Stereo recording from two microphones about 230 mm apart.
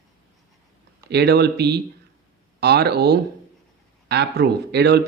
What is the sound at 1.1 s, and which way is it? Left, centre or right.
Speech, right.